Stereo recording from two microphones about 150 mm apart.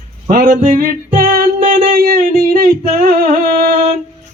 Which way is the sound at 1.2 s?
75° right (ahead or behind).